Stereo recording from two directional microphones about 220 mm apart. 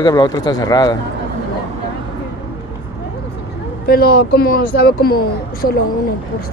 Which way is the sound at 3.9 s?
45° left (ahead or behind).